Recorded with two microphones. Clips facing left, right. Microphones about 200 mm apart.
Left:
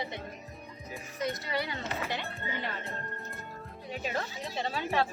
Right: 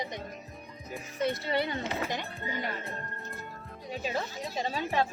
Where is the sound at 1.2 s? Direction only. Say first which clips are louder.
Right 4 dB; 30° right (ahead or behind).